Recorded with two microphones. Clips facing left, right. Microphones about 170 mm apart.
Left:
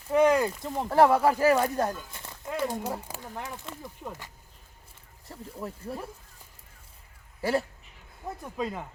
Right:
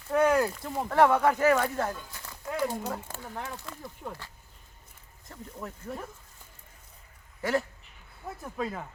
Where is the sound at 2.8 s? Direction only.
15° left (ahead or behind).